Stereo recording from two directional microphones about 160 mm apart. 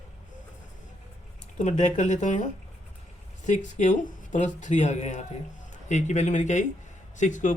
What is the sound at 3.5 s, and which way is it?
Speech, 50° left (ahead or behind).